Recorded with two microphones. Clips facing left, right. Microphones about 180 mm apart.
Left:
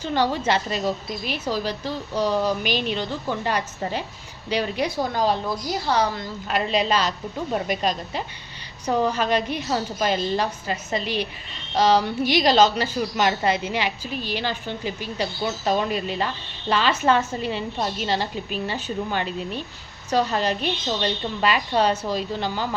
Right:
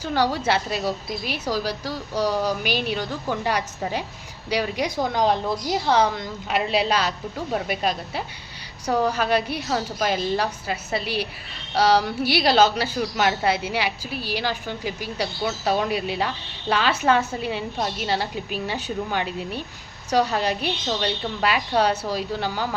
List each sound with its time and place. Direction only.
0.0 s a woman's voice: 10° right (ahead or behind)
6.5 s a woman's voice: 5° right (ahead or behind)
17.7 s a woman's voice: centre (ahead or behind)
18.1 s a woman's voice: 10° right (ahead or behind)